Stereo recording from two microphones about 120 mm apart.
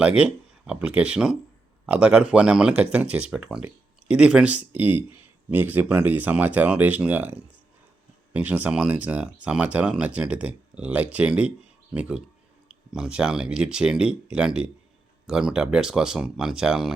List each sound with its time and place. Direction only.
0.0 s speech: 10° right (ahead or behind)